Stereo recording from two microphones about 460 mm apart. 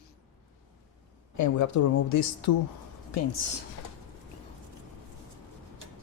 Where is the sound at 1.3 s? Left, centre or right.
Left.